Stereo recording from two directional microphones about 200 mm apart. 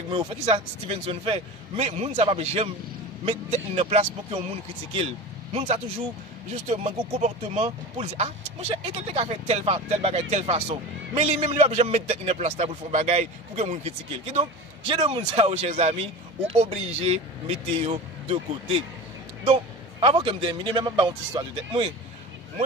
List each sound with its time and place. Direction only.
0.1 s speech: 25° right (ahead or behind)